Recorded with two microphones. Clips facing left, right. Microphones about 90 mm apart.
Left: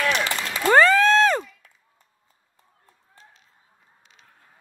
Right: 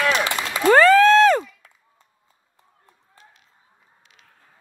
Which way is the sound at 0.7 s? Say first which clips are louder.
Right 3 dB; 25° left (ahead or behind).